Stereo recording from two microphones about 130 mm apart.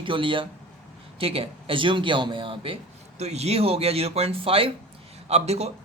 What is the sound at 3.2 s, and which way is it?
Speech, 55° right (ahead or behind).